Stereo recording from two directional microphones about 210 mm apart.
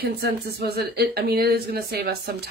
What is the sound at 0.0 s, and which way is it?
A woman's voice, 50° right (ahead or behind).